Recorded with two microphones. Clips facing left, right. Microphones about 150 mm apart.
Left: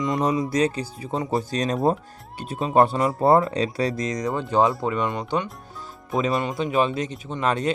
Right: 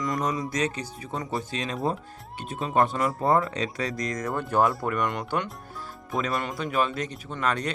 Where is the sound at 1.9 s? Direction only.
40° left (ahead or behind).